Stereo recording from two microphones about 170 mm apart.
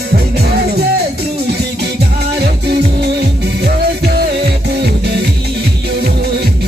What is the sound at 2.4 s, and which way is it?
Music, 75° right (ahead or behind).